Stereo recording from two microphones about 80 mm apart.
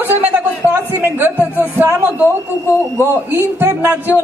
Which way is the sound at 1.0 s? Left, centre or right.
Right.